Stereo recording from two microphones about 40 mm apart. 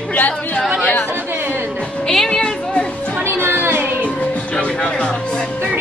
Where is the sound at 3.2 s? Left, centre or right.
Right.